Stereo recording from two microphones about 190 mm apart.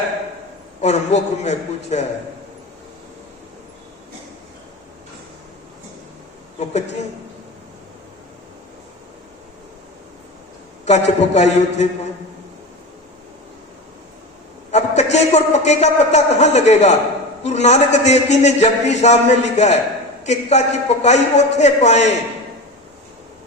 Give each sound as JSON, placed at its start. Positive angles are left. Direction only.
{"t": 0.8, "sound": "a man's voice", "side_deg": 35}
{"t": 6.6, "sound": "a man's voice", "side_deg": 35}
{"t": 10.8, "sound": "a man's voice", "side_deg": 35}
{"t": 14.7, "sound": "a man's voice", "side_deg": 35}